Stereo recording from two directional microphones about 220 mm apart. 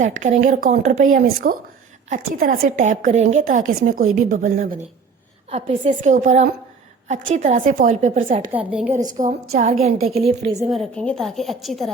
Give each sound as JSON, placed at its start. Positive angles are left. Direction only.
{"t": 0.0, "sound": "speech", "side_deg": -35}
{"t": 8.5, "sound": "a woman's voice", "side_deg": -5}
{"t": 9.1, "sound": "a woman's voice", "side_deg": -35}
{"t": 10.4, "sound": "a woman's voice", "side_deg": -15}
{"t": 10.7, "sound": "a woman's voice", "side_deg": 0}